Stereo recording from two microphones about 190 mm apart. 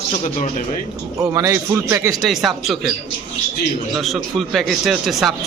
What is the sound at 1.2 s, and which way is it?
Speech, 15° right (ahead or behind).